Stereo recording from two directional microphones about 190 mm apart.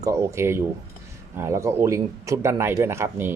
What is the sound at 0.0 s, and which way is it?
Speech, 15° right (ahead or behind).